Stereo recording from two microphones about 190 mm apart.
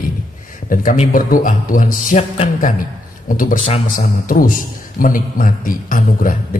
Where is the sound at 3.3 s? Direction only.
45° left (ahead or behind).